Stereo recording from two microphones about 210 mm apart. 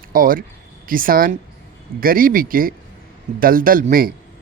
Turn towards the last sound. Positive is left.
turn(degrees=-40)  # may be behind; listen again after turning